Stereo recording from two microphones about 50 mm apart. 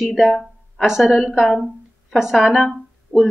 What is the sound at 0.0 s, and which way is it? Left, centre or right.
A woman's voice, centre.